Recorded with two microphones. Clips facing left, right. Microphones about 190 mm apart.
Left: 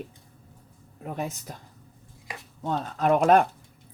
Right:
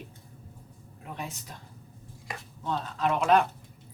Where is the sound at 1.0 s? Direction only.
45° left (ahead or behind).